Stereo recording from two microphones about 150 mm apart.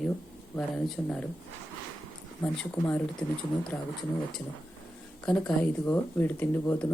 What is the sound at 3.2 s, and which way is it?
Speech, 10° left (ahead or behind).